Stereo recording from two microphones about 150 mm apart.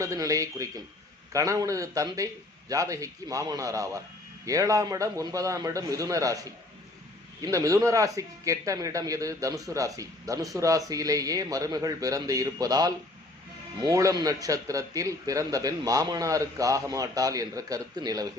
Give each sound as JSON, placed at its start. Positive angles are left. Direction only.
{"t": 0.0, "sound": "a man's voice", "side_deg": -20}